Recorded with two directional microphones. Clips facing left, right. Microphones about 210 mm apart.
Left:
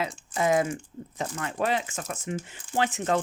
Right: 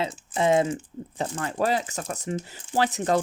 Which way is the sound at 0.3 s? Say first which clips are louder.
Right 3 dB; 25° right (ahead or behind).